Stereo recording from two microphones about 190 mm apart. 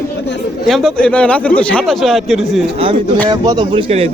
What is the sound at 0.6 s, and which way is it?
Speech, centre (ahead or behind).